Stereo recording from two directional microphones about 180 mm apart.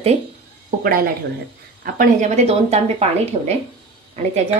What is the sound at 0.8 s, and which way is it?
Speech, 55° right (ahead or behind).